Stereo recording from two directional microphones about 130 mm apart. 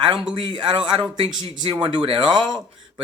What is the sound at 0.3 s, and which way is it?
Speech, 40° right (ahead or behind).